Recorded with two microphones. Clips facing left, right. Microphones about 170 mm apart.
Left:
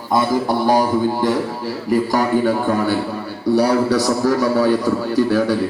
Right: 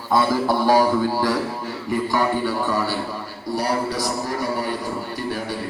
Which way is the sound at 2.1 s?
45° left (ahead or behind).